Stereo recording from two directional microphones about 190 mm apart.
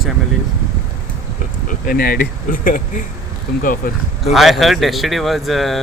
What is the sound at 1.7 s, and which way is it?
Speech, 50° left (ahead or behind).